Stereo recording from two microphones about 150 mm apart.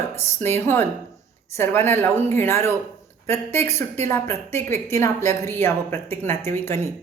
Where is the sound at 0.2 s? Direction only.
15° left (ahead or behind).